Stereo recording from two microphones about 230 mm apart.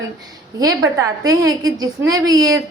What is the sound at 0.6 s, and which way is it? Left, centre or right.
A woman's voice, centre.